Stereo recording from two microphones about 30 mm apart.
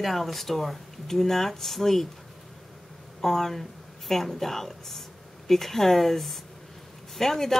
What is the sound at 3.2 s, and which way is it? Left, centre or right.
Speech, centre.